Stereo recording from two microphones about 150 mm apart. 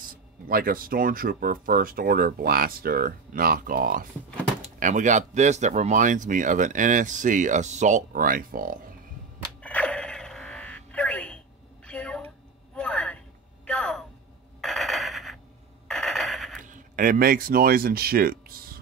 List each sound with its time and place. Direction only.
0.5 s speech: 75° right (ahead or behind)
4.7 s speech: 55° right (ahead or behind); by 8.9 s 70° right (ahead or behind)
9.6 s a sound: 10° left (ahead or behind)
16.6 s speech: 60° right (ahead or behind); by 18.8 s 75° right (ahead or behind)